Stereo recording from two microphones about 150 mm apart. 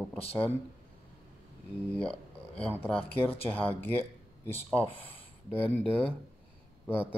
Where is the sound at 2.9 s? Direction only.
40° left (ahead or behind).